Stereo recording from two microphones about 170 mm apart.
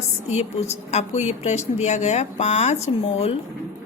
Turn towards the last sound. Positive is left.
turn(degrees=40)  # may be behind; listen again after turning